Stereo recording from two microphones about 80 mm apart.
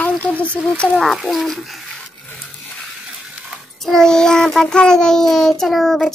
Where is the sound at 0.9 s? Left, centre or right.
Centre.